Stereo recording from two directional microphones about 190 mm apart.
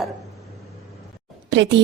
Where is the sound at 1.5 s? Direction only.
70° right (ahead or behind).